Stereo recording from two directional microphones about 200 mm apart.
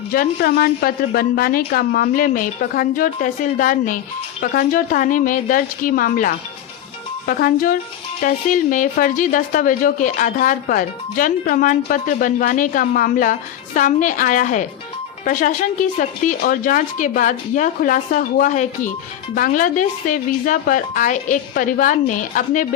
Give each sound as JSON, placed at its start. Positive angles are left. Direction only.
{"t": 0.1, "sound": "a woman's voice", "side_deg": 50}